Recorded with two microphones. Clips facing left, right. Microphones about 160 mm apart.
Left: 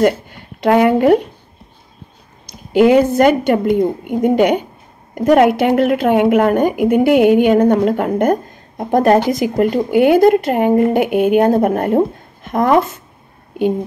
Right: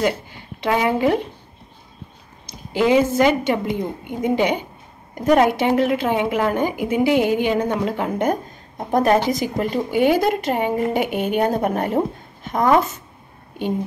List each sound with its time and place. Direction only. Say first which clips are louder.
0.0 s speech: left 7 dB; 55° left (ahead or behind)
2.7 s a woman's voice: left 6 dB; 55° left (ahead or behind)